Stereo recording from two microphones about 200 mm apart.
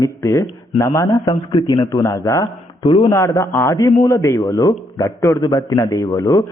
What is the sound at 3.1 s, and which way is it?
A man's voice, 15° left (ahead or behind).